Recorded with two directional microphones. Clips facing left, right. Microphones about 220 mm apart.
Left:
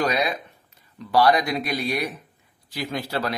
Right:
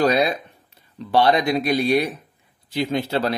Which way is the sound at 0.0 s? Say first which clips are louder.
Right 5 dB; 30° right (ahead or behind).